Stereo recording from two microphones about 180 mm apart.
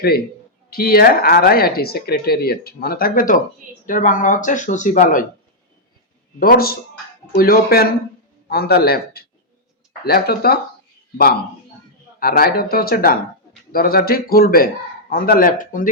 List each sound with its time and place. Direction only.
0.7 s speech: 55° left (ahead or behind)
6.4 s speech: 55° left (ahead or behind)
12.2 s speech: 55° left (ahead or behind)